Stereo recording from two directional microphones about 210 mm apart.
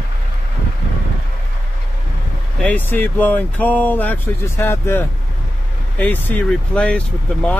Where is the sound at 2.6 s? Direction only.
10° left (ahead or behind).